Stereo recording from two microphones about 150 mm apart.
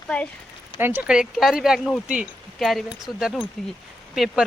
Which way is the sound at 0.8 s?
15° right (ahead or behind).